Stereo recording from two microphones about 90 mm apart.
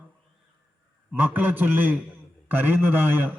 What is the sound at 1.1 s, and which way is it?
A man's voice, 20° right (ahead or behind).